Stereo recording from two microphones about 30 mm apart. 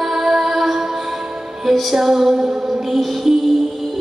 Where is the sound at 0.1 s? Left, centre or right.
Centre.